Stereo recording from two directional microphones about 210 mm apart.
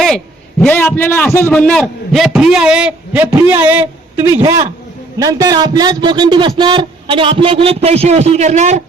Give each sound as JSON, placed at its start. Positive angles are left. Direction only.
{"t": 0.6, "sound": "a man's voice", "side_deg": 5}